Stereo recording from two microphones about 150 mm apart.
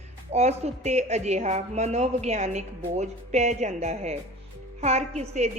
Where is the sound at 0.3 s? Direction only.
45° right (ahead or behind).